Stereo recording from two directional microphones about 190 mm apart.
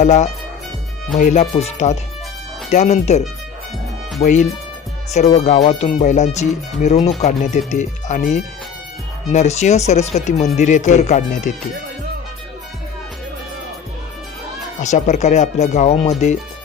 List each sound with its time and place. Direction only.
0.0 s speech: 35° left (ahead or behind)
14.8 s speech: 40° left (ahead or behind)